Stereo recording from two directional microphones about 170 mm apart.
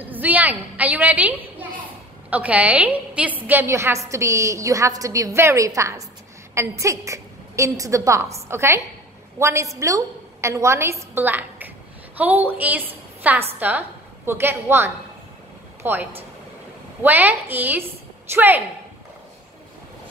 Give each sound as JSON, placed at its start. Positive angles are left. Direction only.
{"t": 0.1, "sound": "a woman's voice", "side_deg": -10}